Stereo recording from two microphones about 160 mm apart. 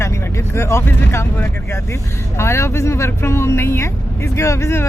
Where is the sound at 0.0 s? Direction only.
15° left (ahead or behind).